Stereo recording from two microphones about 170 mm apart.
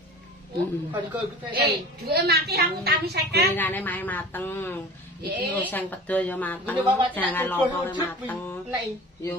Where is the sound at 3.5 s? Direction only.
10° left (ahead or behind).